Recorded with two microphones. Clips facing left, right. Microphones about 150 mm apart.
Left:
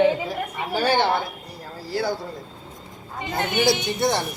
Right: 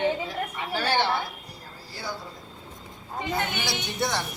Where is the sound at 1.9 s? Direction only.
75° left (ahead or behind).